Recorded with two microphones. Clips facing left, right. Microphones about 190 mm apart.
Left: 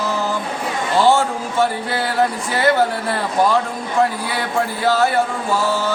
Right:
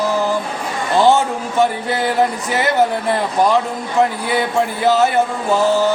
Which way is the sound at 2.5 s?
20° right (ahead or behind).